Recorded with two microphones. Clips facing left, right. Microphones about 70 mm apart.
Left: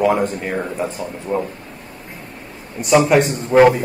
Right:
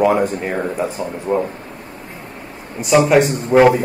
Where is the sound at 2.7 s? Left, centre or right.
Centre.